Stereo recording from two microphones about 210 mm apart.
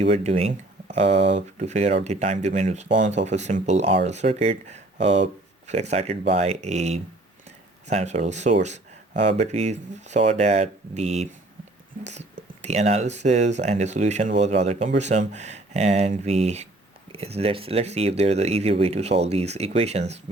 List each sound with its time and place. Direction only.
0.0 s speech: 30° right (ahead or behind)
8.6 s a sound: 35° right (ahead or behind)
9.4 s speech: 30° right (ahead or behind)
12.6 s speech: 30° right (ahead or behind)